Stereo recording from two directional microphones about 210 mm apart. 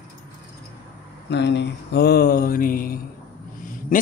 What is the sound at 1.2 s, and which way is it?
Speech, 55° left (ahead or behind).